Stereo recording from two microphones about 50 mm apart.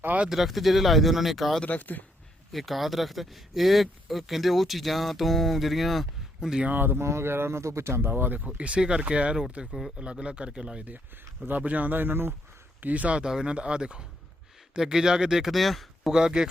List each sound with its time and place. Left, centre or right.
0.0 s speech: right
0.3 s speech: centre
1.6 s speech: left
2.5 s speech: centre
6.7 s speech: right
7.0 s speech: right
7.6 s speech: right
8.1 s speech: right
8.4 s a man's voice: right
11.4 s speech: right
12.8 s a man's voice: right
13.2 s a man's voice: centre
16.1 s speech: centre